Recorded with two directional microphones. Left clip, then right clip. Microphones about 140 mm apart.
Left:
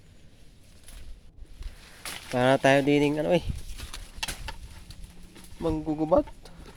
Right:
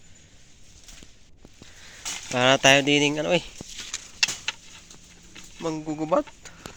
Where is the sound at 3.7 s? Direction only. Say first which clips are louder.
Right 9 dB; 55° left (ahead or behind).